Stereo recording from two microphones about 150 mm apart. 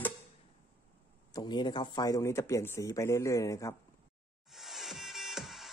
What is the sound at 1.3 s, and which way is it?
Speech, 30° left (ahead or behind).